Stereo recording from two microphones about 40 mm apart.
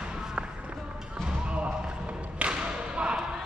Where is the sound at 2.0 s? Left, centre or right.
Right.